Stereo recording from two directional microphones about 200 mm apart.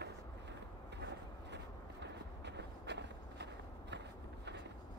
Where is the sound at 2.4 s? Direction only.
60° right (ahead or behind).